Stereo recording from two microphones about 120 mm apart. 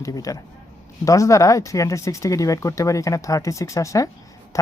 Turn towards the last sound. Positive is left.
turn(degrees=25)  # may be behind; listen again after turning